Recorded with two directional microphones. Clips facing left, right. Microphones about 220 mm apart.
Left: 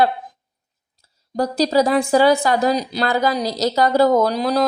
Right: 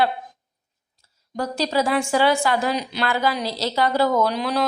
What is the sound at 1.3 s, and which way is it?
Speech, 35° left (ahead or behind).